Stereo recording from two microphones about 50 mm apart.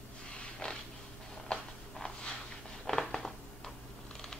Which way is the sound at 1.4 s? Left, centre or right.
Centre.